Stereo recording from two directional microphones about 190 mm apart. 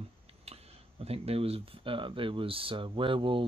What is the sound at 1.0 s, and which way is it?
Speech, 30° right (ahead or behind).